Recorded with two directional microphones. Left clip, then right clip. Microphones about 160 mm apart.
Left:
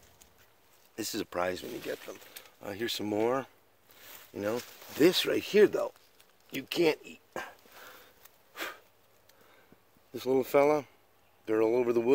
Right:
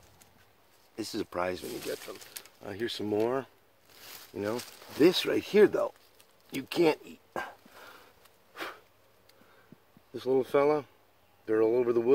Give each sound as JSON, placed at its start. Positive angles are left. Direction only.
{"t": 0.9, "sound": "speech", "side_deg": 10}
{"t": 2.6, "sound": "speech", "side_deg": 30}
{"t": 4.4, "sound": "speech", "side_deg": 10}
{"t": 7.7, "sound": "sniff", "side_deg": 0}
{"t": 10.1, "sound": "speech", "side_deg": 25}